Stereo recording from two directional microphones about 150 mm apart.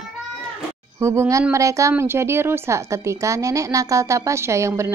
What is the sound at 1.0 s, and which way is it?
A woman's voice, 20° right (ahead or behind).